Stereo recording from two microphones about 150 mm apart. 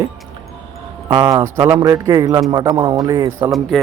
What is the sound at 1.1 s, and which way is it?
Speech, 30° right (ahead or behind).